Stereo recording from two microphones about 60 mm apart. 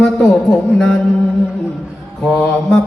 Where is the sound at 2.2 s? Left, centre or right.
Centre.